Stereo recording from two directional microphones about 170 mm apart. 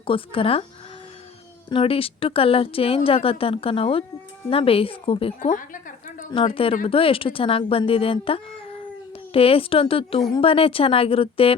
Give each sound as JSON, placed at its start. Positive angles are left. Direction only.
{"t": 0.0, "sound": "speech", "side_deg": 30}
{"t": 1.7, "sound": "speech", "side_deg": 30}
{"t": 5.4, "sound": "a woman's voice", "side_deg": 50}
{"t": 6.3, "sound": "speech", "side_deg": 35}